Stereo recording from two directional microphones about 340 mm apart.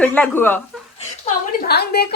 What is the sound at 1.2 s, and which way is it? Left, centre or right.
Speech, left.